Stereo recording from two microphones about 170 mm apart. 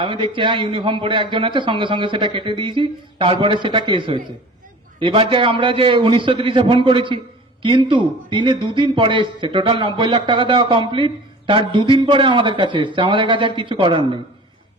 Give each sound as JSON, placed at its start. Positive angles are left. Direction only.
{"t": 0.0, "sound": "a man's voice", "side_deg": -30}